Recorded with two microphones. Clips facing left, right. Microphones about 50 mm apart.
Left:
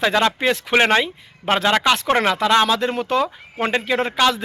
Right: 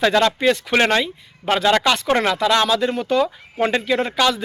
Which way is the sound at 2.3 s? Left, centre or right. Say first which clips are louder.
Left 1 dB; left.